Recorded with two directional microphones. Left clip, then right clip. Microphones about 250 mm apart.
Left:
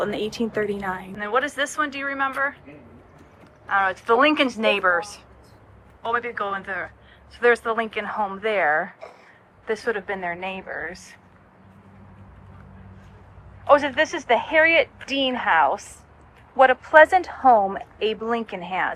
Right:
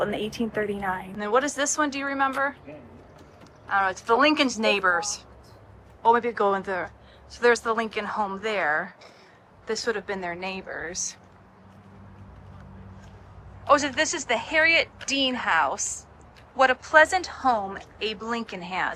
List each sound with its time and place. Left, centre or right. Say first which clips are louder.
0.0 s speech: left 2 dB; centre
1.2 s a woman's voice: left 1 dB; centre
3.7 s a woman's voice: left 3 dB; centre
6.0 s a woman's voice: right 4 dB; centre
13.7 s a woman's voice: left 4 dB; centre
16.8 s a woman's voice: left 5 dB; centre
17.2 s a woman's voice: left 8 dB; centre